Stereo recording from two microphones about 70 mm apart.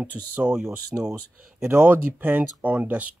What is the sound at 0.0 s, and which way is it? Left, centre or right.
Speech, right.